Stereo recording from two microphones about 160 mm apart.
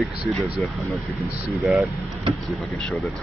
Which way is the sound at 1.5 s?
Centre (ahead or behind).